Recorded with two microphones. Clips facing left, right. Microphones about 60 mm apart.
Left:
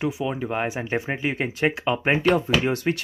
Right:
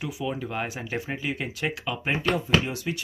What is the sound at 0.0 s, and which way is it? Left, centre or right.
Speech, left.